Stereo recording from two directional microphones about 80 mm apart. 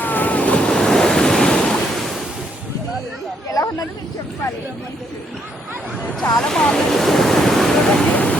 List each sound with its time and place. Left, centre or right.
0.0 s waves: left; by 2.1 s centre
3.5 s a sound: left
6.3 s waves: centre